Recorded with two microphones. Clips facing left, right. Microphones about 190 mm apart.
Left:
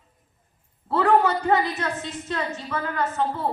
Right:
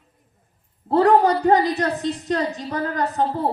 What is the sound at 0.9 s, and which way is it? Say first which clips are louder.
A woman's voice: right 4 dB; 40° right (ahead or behind).